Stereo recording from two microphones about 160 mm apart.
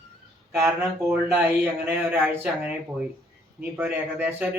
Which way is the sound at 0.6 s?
15° right (ahead or behind).